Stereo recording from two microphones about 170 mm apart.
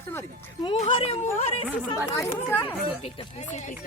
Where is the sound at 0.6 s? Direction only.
30° left (ahead or behind).